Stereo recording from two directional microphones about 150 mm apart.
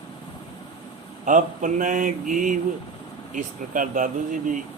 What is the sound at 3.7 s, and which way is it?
Speech, 60° right (ahead or behind).